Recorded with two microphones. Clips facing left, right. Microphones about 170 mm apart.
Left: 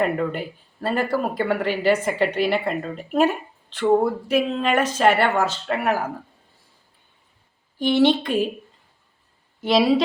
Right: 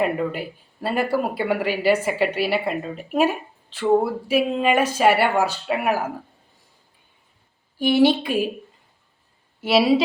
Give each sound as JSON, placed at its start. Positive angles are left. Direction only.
{"t": 0.0, "sound": "speech", "side_deg": -5}
{"t": 7.8, "sound": "speech", "side_deg": -10}
{"t": 9.6, "sound": "speech", "side_deg": -5}